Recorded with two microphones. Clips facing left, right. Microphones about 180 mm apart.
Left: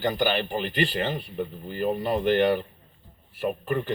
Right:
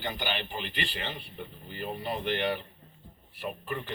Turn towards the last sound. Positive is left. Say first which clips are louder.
# left 9 dB
turn(degrees=45)  # may be behind; listen again after turning